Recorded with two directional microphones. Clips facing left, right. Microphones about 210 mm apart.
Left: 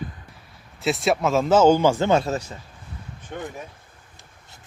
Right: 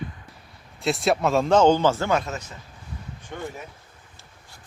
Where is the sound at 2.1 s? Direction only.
30° left (ahead or behind).